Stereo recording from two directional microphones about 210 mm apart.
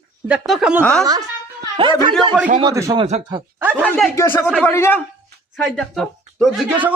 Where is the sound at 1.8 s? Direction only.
25° right (ahead or behind).